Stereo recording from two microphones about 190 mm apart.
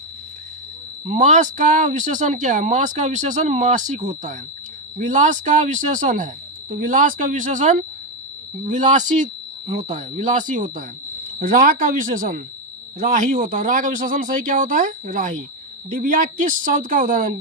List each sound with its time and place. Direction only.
1.0 s speech: 40° right (ahead or behind)